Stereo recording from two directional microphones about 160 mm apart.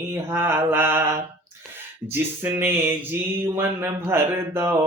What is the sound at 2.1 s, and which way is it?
Speech, 15° right (ahead or behind).